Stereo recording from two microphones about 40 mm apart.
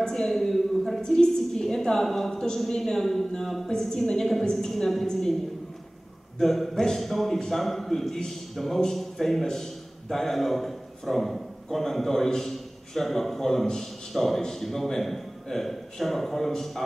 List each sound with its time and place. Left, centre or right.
0.0 s a sound: centre
2.6 s a man's voice: centre
3.6 s a woman's voice: centre
6.4 s a man's voice: centre